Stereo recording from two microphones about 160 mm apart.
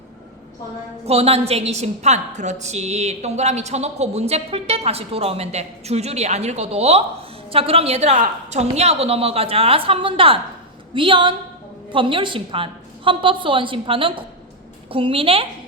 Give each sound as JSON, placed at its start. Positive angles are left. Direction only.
{"t": 1.0, "sound": "a woman's voice", "side_deg": -40}